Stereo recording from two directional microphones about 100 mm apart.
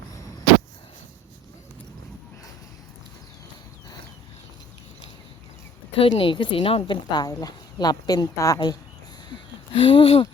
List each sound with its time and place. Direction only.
6.0 s speech: 60° left (ahead or behind); by 8.8 s 40° left (ahead or behind)
9.3 s speech: 60° left (ahead or behind)